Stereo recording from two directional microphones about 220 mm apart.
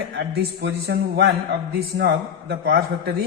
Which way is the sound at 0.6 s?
50° right (ahead or behind).